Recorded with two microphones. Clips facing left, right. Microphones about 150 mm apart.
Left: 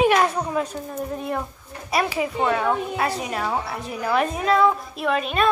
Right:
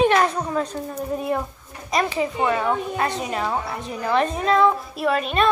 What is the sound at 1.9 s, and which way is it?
A child's voice, 5° left (ahead or behind).